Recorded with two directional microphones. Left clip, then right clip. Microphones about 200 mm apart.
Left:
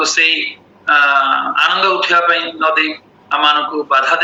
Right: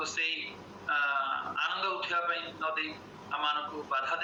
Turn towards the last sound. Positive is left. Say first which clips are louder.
# left 19 dB
turn(degrees=45)  # may be behind; listen again after turning